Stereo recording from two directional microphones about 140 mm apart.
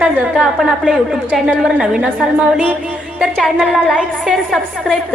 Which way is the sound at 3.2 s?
5° left (ahead or behind).